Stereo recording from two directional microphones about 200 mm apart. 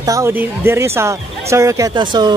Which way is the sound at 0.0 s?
15° right (ahead or behind).